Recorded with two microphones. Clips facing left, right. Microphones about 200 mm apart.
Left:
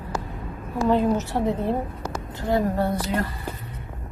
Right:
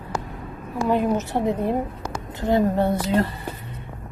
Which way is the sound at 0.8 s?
15° right (ahead or behind).